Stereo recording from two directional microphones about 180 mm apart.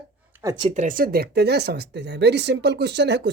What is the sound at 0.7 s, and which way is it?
Speech, 45° right (ahead or behind).